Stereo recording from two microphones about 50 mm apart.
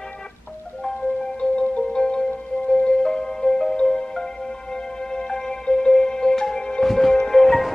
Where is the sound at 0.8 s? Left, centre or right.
Centre.